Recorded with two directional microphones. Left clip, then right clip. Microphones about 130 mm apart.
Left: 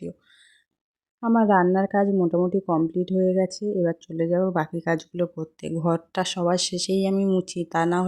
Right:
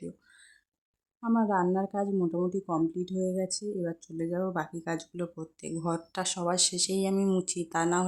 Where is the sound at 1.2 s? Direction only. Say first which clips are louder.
Left 8 dB; 50° left (ahead or behind).